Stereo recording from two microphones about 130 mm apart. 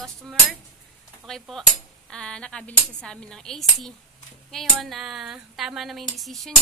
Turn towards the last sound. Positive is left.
turn(degrees=0)  # may be behind; listen again after turning